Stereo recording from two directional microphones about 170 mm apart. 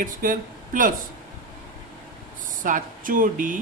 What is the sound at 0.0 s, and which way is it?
Speech, 55° right (ahead or behind).